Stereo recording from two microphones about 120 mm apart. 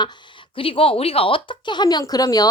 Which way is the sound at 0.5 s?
50° left (ahead or behind).